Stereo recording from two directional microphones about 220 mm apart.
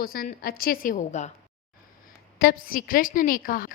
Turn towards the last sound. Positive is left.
turn(degrees=40)  # may be behind; listen again after turning